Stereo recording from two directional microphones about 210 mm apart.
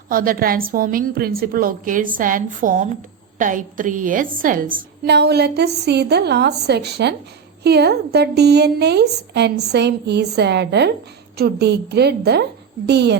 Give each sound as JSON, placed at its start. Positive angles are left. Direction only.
{"t": 0.1, "sound": "a woman's voice", "side_deg": -40}